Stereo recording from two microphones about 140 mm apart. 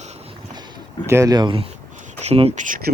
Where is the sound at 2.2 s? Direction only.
50° right (ahead or behind).